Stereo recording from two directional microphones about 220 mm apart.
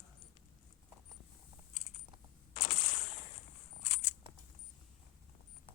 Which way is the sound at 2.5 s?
30° left (ahead or behind).